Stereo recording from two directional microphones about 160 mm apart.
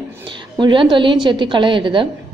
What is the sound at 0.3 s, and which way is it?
A woman's voice, 30° right (ahead or behind).